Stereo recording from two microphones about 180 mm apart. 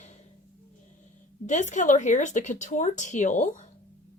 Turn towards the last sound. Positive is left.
turn(degrees=45)  # may be behind; listen again after turning